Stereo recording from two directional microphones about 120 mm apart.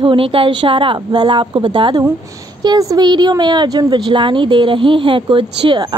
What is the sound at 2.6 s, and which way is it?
A woman's voice, 30° right (ahead or behind).